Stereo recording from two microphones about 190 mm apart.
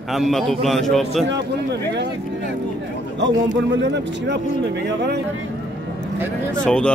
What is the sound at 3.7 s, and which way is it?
Speech, 65° right (ahead or behind).